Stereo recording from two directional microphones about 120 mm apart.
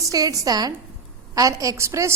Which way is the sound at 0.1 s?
30° right (ahead or behind).